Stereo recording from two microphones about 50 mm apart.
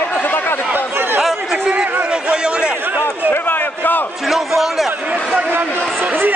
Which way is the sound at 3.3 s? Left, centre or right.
Left.